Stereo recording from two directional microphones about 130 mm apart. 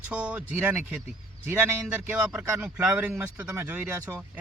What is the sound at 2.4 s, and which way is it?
Speech, 10° right (ahead or behind).